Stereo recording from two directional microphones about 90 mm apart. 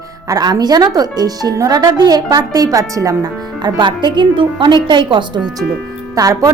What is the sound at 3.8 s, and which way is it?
A woman's voice, 55° right (ahead or behind).